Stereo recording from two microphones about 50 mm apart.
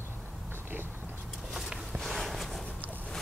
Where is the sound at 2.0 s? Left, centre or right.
Centre.